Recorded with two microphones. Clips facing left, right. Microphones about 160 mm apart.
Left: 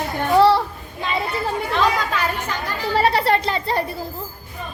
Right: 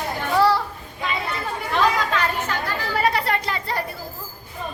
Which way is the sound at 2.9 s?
30° left (ahead or behind).